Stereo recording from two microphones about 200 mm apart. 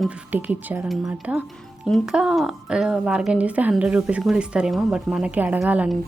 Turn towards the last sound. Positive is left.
turn(degrees=-5)  # may be behind; listen again after turning